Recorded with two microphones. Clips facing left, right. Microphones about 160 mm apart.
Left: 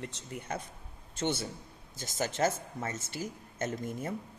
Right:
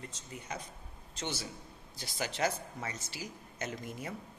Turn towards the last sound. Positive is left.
turn(degrees=50)  # may be behind; listen again after turning